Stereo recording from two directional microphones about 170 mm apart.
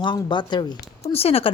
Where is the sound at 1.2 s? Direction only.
35° left (ahead or behind).